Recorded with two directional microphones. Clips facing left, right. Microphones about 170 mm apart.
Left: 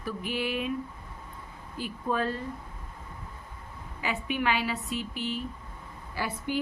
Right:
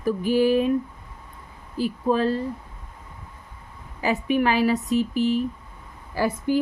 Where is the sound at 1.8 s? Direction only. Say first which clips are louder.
Right 8 dB; 30° right (ahead or behind).